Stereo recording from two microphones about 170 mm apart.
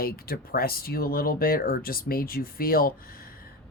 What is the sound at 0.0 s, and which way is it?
Speech, 60° left (ahead or behind).